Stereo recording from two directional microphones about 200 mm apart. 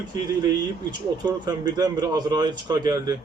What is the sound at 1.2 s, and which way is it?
A man's voice, 20° right (ahead or behind).